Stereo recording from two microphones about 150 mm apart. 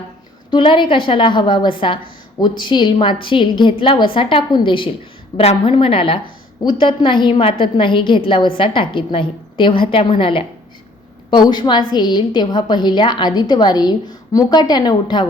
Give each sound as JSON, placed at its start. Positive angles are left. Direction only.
{"t": 0.5, "sound": "a woman's voice", "side_deg": 35}